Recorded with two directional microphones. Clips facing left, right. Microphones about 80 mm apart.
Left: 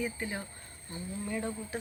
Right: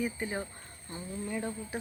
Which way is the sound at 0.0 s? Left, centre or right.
Centre.